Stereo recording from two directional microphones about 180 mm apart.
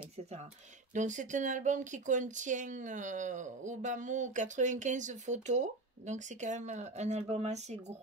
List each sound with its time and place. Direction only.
0.9 s speech: 45° right (ahead or behind)